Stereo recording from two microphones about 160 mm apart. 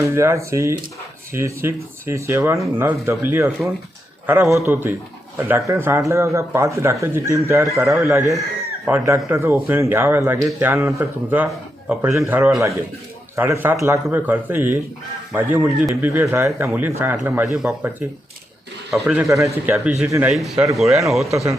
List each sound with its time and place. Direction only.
0.0 s a man's voice: 15° right (ahead or behind)
12.4 s speech: centre (ahead or behind)
13.3 s a man's voice: 15° right (ahead or behind)
19.3 s a man's voice: 20° right (ahead or behind)
20.3 s speech: centre (ahead or behind)